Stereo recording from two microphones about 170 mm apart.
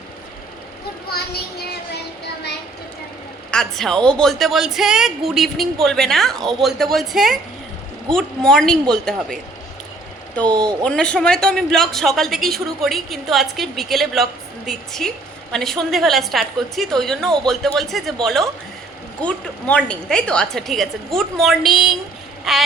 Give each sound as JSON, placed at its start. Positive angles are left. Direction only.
{"t": 1.1, "sound": "speech", "side_deg": 70}
{"t": 3.5, "sound": "a woman's voice", "side_deg": 5}
{"t": 10.4, "sound": "speech", "side_deg": -25}
{"t": 10.8, "sound": "a woman's voice", "side_deg": 5}